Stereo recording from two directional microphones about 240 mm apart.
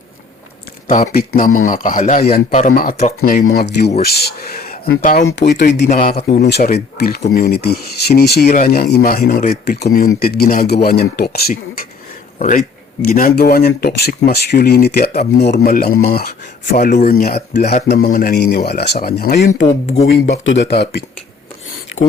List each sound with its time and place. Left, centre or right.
0.9 s speech: left
19.6 s speech: left
20.1 s speech: left